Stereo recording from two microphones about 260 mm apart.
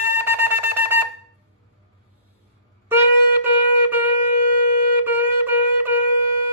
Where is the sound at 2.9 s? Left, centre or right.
Centre.